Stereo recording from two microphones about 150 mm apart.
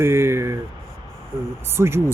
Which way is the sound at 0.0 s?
15° right (ahead or behind).